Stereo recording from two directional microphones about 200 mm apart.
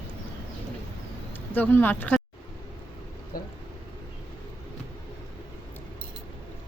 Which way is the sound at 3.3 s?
45° left (ahead or behind).